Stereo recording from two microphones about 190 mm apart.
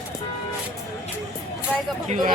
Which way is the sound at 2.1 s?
40° right (ahead or behind).